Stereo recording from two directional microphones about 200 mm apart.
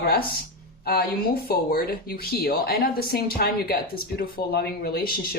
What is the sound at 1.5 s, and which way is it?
Speech, 50° left (ahead or behind).